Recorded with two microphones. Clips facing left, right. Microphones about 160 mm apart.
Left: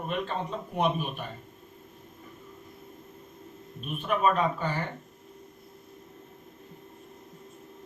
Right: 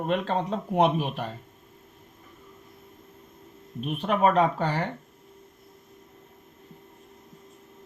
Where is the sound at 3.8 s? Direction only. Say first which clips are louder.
Right 3 dB; 75° right (ahead or behind).